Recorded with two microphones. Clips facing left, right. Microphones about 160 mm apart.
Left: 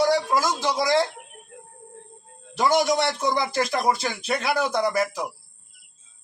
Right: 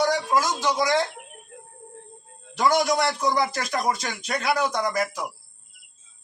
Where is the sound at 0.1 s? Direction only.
30° left (ahead or behind).